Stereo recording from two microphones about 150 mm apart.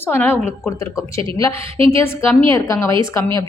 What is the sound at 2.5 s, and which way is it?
Speech, 20° left (ahead or behind).